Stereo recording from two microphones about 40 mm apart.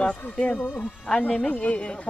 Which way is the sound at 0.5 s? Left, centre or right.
Left.